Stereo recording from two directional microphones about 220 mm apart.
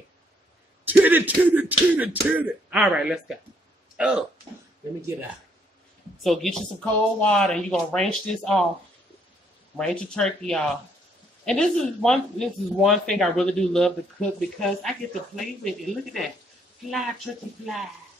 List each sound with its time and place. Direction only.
0.8 s speech: 10° right (ahead or behind)
3.9 s a sound: 5° right (ahead or behind)
6.2 s speech: centre (ahead or behind)
9.8 s speech: 5° left (ahead or behind)
17.3 s speech: 5° left (ahead or behind)